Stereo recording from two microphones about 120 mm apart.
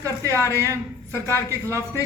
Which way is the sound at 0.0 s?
25° right (ahead or behind).